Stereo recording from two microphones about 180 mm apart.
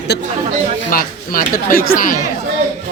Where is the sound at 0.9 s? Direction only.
50° left (ahead or behind).